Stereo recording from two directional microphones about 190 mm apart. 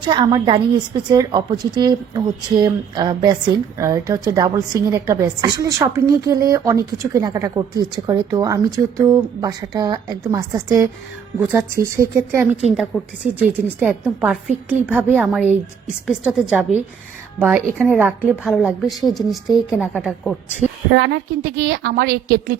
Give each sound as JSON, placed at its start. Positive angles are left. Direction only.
{"t": 0.0, "sound": "a woman's voice", "side_deg": -25}
{"t": 12.9, "sound": "a woman's voice", "side_deg": 0}
{"t": 17.7, "sound": "a woman's voice", "side_deg": -10}
{"t": 20.9, "sound": "a woman's voice", "side_deg": -65}